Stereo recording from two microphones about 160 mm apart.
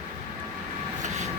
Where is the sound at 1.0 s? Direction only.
45° right (ahead or behind).